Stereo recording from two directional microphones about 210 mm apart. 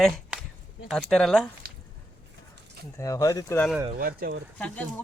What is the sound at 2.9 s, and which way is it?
Speech, 15° left (ahead or behind).